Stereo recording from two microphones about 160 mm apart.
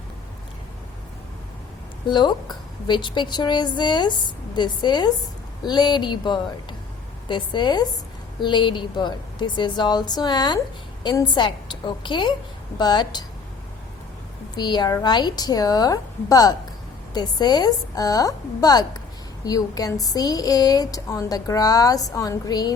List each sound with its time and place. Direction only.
2.0 s a woman's voice: 30° left (ahead or behind)
14.5 s a woman's voice: 25° left (ahead or behind)